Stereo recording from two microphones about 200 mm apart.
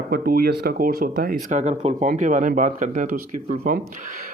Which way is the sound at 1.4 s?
35° right (ahead or behind).